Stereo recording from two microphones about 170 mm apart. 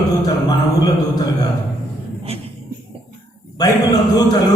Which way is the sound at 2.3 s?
35° right (ahead or behind).